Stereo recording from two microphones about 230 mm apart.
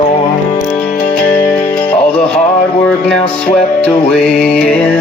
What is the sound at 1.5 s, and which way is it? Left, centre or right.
Music, centre.